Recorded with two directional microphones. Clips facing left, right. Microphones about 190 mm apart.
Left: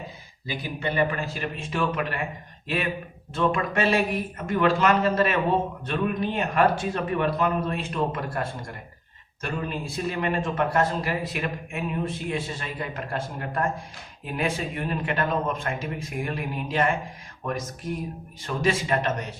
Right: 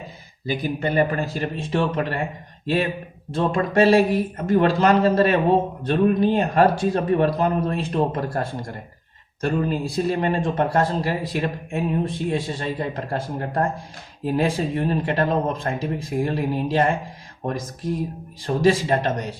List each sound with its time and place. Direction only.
0.4 s speech: 40° right (ahead or behind)